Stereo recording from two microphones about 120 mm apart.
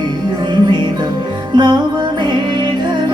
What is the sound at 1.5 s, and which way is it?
Music, 35° right (ahead or behind).